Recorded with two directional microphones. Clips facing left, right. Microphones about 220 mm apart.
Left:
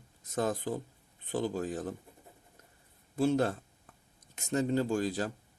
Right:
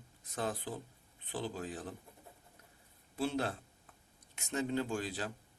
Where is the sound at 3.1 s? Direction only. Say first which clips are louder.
Left 7 dB; 45° left (ahead or behind).